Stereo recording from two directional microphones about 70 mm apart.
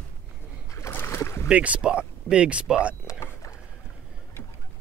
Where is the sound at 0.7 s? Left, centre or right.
Left.